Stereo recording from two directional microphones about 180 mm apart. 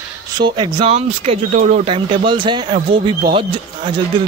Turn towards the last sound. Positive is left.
turn(degrees=-30)  # may be behind; listen again after turning